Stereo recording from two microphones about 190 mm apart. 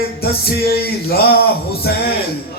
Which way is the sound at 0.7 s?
55° left (ahead or behind).